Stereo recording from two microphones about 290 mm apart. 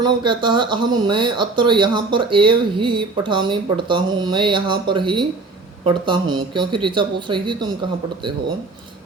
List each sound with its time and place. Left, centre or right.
0.0 s speech: centre